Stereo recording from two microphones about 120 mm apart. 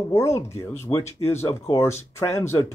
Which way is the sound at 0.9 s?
50° left (ahead or behind).